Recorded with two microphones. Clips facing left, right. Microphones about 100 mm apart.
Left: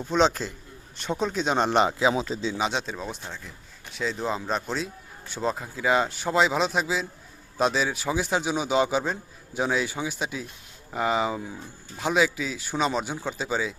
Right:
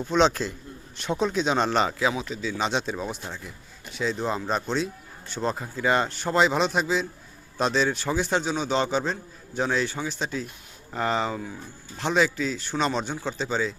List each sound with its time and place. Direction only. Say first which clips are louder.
0.0 s a man's voice: right 1 dB; centre (ahead or behind)
1.5 s speech: left 1 dB; 15° left (ahead or behind)
2.1 s speech: left 3 dB; 30° left (ahead or behind)
2.6 s a man's voice: right 1 dB; centre (ahead or behind)